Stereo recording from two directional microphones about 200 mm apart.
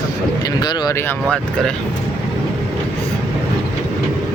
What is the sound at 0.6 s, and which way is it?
Speech, 15° left (ahead or behind).